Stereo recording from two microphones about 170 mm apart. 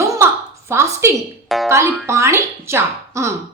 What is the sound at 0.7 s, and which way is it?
Speech, 15° right (ahead or behind).